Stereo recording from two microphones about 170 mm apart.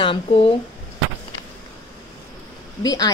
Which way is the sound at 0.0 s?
30° left (ahead or behind).